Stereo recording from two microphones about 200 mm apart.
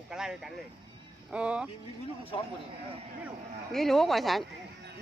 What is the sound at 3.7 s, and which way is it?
Speech, centre (ahead or behind).